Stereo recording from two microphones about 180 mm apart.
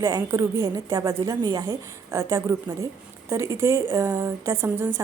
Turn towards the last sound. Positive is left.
turn(degrees=-15)  # may be behind; listen again after turning